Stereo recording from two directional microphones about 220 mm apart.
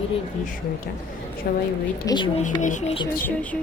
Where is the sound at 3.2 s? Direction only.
5° left (ahead or behind).